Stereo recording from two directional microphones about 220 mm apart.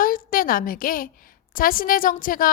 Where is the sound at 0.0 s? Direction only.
40° left (ahead or behind).